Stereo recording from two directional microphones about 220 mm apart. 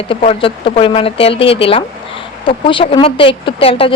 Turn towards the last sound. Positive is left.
turn(degrees=25)  # may be behind; listen again after turning